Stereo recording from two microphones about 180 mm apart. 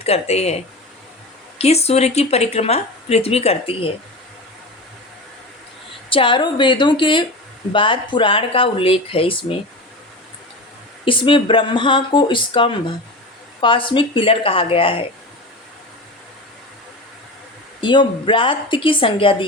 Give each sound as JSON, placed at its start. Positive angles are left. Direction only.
{"t": 0.0, "sound": "a woman's voice", "side_deg": 35}
{"t": 1.5, "sound": "a woman's voice", "side_deg": 35}
{"t": 6.1, "sound": "speech", "side_deg": 30}
{"t": 11.0, "sound": "a woman's voice", "side_deg": 30}
{"t": 17.7, "sound": "speech", "side_deg": 25}